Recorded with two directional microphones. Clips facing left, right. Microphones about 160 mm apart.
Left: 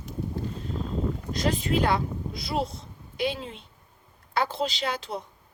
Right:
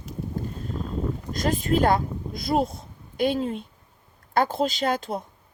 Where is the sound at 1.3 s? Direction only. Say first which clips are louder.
Right 3 dB; 50° right (ahead or behind).